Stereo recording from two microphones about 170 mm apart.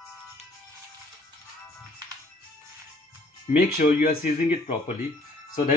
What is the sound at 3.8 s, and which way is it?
Speech, 55° left (ahead or behind).